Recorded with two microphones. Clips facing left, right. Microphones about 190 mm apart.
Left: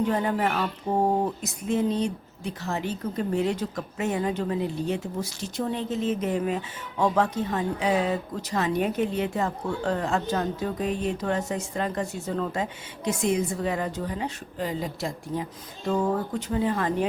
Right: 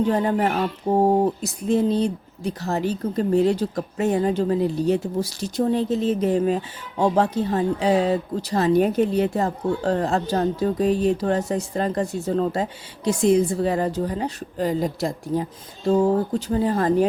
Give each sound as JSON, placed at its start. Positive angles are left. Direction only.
{"t": 0.1, "sound": "speech", "side_deg": -35}